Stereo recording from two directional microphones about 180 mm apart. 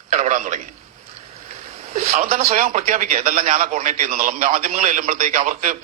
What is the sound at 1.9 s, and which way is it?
A man's voice, 40° right (ahead or behind).